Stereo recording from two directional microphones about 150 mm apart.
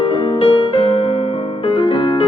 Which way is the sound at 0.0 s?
35° left (ahead or behind).